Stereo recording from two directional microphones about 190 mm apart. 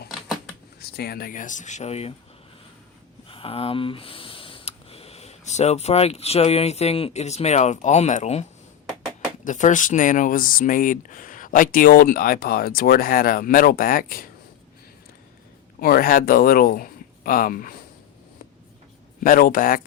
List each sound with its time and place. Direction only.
0.8 s speech: 55° left (ahead or behind); by 2.1 s 35° left (ahead or behind)
3.2 s speech: 30° left (ahead or behind); by 14.3 s 50° left (ahead or behind)
15.8 s speech: 50° left (ahead or behind)
19.2 s speech: 50° left (ahead or behind)